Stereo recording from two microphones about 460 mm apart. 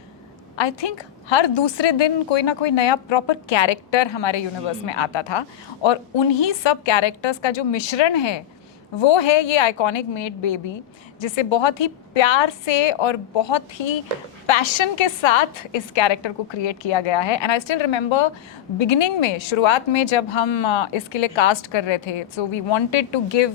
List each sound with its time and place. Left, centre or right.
0.5 s speech: left
14.4 s speech: left